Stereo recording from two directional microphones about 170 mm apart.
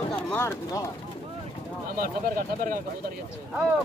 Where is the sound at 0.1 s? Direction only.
10° left (ahead or behind).